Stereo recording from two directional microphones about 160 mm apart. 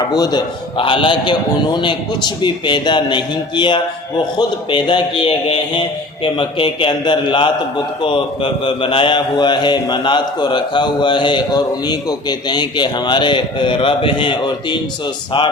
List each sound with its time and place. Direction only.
0.1 s a man's voice: 25° left (ahead or behind)